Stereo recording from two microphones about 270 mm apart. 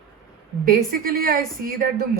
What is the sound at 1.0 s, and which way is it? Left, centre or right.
Speech, right.